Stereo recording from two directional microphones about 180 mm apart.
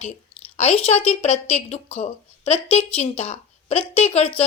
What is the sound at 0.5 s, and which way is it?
A woman's voice, 35° left (ahead or behind).